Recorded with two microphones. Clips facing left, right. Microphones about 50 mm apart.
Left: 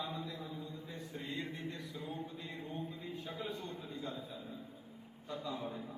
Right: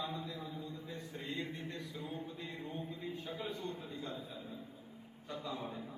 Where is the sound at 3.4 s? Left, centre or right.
Right.